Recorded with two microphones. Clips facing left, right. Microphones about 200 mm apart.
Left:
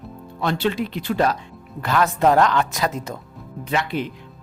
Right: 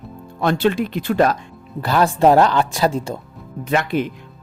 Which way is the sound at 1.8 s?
35° right (ahead or behind).